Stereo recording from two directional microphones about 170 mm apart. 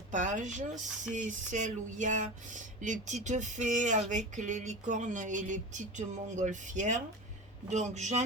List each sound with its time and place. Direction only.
0.1 s speech: 45° right (ahead or behind)